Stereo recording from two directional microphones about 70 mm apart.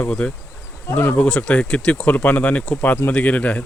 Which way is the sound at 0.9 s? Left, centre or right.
Left.